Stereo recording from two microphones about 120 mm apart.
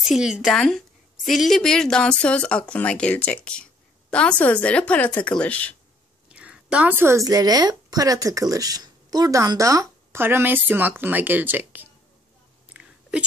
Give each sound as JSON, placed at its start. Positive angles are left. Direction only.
{"t": 0.1, "sound": "a woman's voice", "side_deg": -5}
{"t": 6.2, "sound": "speech", "side_deg": -10}
{"t": 12.6, "sound": "a sound", "side_deg": -10}